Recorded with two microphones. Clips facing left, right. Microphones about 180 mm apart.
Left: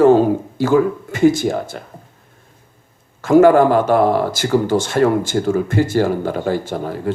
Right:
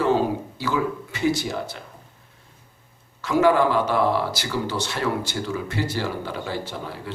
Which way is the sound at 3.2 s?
50° left (ahead or behind).